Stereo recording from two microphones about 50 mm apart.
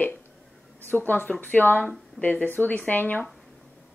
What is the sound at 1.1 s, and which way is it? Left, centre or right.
A woman's voice, left.